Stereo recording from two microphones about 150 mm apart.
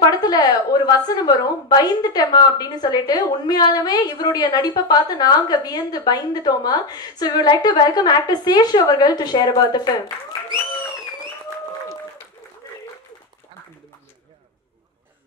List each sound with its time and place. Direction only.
0.2 s a woman's voice: 25° left (ahead or behind)